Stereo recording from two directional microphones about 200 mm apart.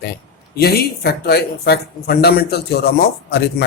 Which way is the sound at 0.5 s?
50° left (ahead or behind).